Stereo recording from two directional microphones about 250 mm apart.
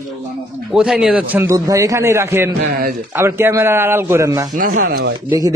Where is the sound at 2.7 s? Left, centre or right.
Right.